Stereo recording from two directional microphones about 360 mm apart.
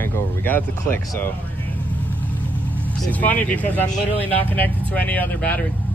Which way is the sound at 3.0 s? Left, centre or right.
Centre.